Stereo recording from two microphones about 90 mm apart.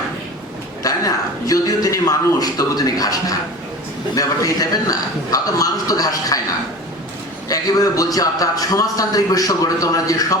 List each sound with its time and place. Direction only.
0.8 s a man's voice: 40° left (ahead or behind)
7.4 s a man's voice: 40° left (ahead or behind)